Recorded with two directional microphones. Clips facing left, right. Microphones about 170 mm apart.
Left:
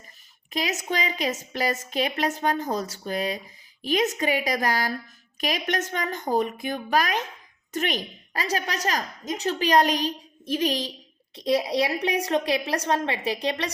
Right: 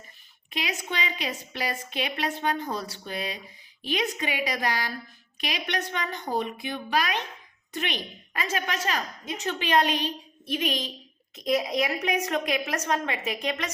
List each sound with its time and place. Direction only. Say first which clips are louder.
0.5 s a woman's voice: left 4 dB; 40° left (ahead or behind)